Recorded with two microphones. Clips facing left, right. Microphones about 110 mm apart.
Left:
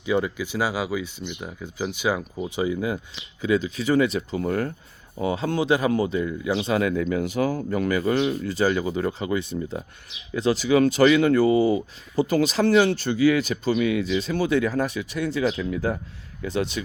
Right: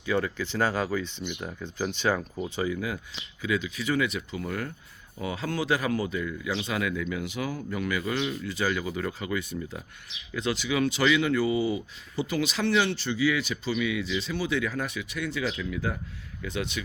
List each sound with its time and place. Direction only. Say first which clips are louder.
0.0 s speech: left 4 dB; 15° left (ahead or behind); by 4.7 s 40° left (ahead or behind)
5.2 s speech: left 6 dB; 25° left (ahead or behind)